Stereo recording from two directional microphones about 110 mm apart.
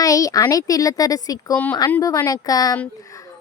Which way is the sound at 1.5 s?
15° left (ahead or behind).